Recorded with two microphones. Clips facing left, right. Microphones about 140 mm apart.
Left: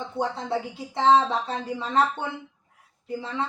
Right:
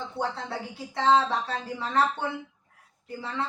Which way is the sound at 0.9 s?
20° left (ahead or behind).